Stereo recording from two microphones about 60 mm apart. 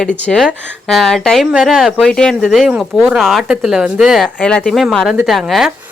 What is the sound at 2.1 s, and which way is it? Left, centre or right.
Speech, centre.